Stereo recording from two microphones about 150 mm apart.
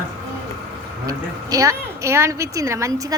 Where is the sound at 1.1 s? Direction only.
20° right (ahead or behind).